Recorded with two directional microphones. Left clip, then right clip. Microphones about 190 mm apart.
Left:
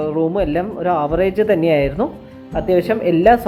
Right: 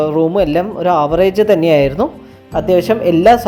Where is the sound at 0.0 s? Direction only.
45° right (ahead or behind).